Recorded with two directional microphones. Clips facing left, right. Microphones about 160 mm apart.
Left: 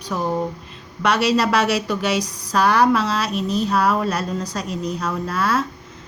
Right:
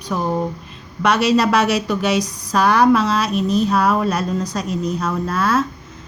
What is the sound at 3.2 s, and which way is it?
Speech, 50° right (ahead or behind).